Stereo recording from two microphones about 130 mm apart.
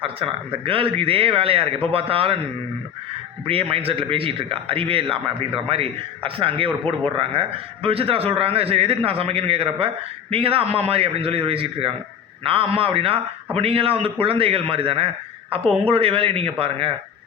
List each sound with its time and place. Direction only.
0.0 s a man's voice: 45° right (ahead or behind)
3.4 s a man's voice: 45° right (ahead or behind)